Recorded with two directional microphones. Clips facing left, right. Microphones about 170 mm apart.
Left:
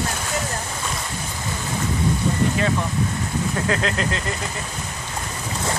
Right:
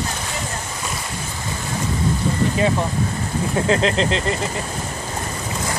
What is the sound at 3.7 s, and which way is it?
Speech, 25° right (ahead or behind).